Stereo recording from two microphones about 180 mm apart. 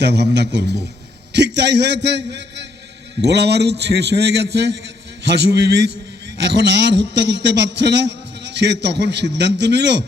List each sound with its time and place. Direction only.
0.0 s a man's voice: 70° right (ahead or behind)